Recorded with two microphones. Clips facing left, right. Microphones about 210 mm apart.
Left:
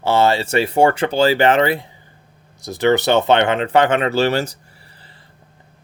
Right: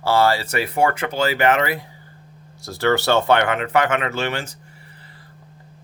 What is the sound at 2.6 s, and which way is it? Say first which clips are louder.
Speech: left 4 dB; 20° left (ahead or behind).